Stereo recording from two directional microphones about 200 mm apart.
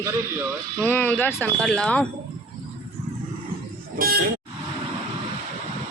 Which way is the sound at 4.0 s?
45° right (ahead or behind).